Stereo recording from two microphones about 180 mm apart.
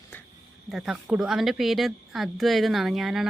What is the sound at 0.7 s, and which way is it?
A woman's voice, 5° right (ahead or behind).